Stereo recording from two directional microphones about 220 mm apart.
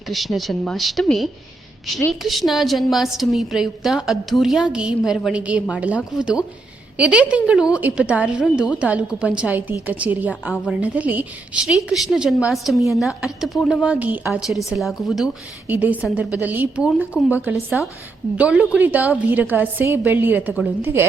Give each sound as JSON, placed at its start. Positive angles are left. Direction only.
{"t": 0.1, "sound": "a woman's voice", "side_deg": 0}